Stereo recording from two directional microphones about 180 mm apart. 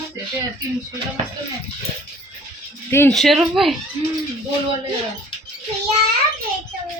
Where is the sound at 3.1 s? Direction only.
Centre (ahead or behind).